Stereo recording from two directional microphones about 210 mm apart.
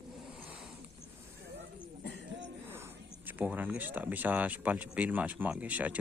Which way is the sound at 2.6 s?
10° right (ahead or behind).